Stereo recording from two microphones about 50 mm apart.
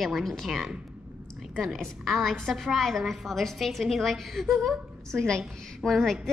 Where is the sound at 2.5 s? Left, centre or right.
Centre.